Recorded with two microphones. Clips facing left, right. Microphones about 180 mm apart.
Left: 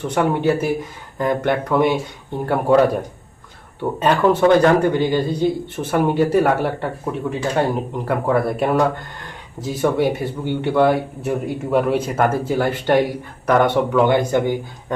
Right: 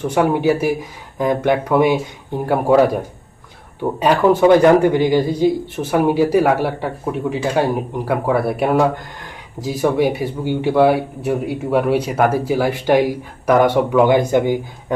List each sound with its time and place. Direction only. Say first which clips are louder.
0.1 s speech: right 2 dB; 5° right (ahead or behind)